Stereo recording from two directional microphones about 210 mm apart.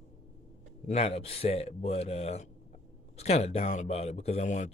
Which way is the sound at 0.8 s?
30° left (ahead or behind).